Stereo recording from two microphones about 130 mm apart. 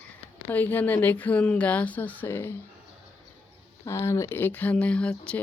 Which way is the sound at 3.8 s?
20° left (ahead or behind).